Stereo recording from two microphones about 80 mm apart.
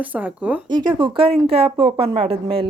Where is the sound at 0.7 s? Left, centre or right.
Right.